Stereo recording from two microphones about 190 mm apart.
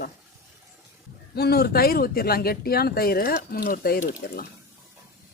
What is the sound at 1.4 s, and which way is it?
Speech, 55° left (ahead or behind).